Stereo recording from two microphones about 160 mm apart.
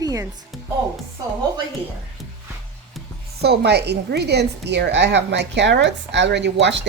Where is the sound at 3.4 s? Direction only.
90° right.